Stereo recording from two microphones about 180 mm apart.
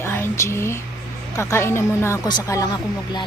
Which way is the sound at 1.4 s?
15° left (ahead or behind).